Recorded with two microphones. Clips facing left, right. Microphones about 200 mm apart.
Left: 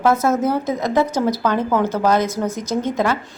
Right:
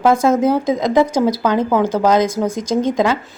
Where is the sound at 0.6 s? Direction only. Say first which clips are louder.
Right 4 dB; 90° right.